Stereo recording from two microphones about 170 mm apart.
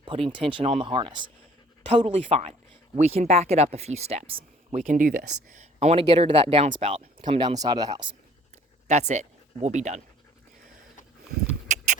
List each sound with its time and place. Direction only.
0.0 s speech: 30° right (ahead or behind)
4.8 s speech: 50° right (ahead or behind); by 8.1 s 25° right (ahead or behind)
8.9 s speech: 40° right (ahead or behind)